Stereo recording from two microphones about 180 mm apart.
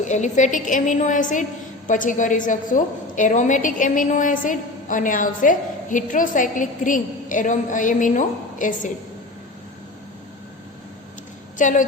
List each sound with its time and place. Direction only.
0.0 s a woman's voice: 40° left (ahead or behind)
11.5 s a woman's voice: 45° left (ahead or behind)